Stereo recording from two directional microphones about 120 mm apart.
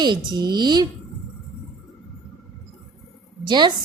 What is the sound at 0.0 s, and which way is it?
Speech, 35° right (ahead or behind).